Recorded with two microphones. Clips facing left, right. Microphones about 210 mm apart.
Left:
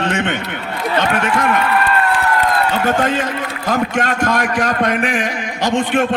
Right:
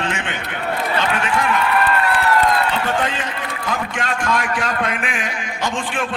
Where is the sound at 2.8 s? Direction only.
45° left (ahead or behind).